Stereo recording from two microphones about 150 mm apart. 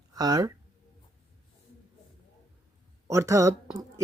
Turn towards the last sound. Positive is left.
turn(degrees=-20)  # may be behind; listen again after turning